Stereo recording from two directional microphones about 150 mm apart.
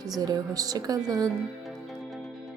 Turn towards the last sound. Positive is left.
turn(degrees=-25)  # may be behind; listen again after turning